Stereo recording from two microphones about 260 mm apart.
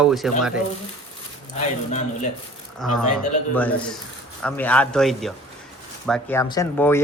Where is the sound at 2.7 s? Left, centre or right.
Centre.